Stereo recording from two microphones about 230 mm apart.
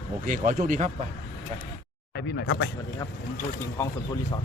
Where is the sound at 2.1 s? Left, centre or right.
Left.